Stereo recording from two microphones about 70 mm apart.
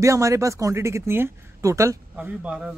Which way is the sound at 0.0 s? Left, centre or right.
Right.